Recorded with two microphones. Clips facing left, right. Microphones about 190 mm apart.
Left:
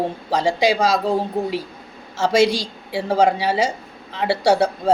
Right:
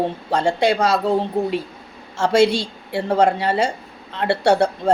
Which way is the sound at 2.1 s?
5° left (ahead or behind).